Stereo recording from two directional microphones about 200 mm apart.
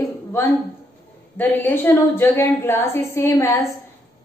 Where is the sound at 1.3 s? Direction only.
10° left (ahead or behind).